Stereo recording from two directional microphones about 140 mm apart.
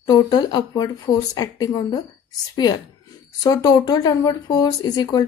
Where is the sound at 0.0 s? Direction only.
30° left (ahead or behind).